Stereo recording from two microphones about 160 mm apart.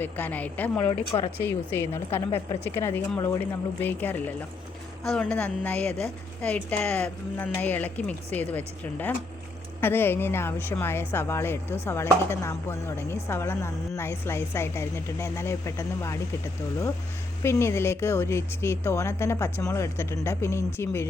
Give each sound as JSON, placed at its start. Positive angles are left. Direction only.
{"t": 0.0, "sound": "a woman's voice", "side_deg": 10}
{"t": 1.1, "sound": "speech", "side_deg": 30}
{"t": 1.5, "sound": "a woman's voice", "side_deg": 15}
{"t": 17.4, "sound": "a woman's voice", "side_deg": 15}